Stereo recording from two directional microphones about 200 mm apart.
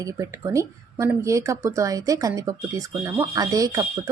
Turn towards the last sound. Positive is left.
turn(degrees=-15)  # may be behind; listen again after turning